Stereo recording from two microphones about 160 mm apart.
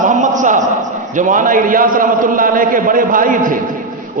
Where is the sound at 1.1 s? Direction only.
55° right (ahead or behind).